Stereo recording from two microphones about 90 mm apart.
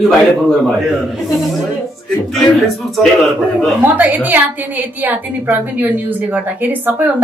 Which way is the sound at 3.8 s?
20° right (ahead or behind).